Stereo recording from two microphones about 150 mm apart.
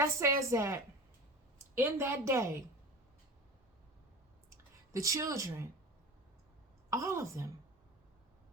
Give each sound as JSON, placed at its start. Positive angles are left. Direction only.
{"t": 0.0, "sound": "a woman's voice", "side_deg": -20}
{"t": 4.4, "sound": "clicking", "side_deg": -20}
{"t": 6.9, "sound": "a woman's voice", "side_deg": -20}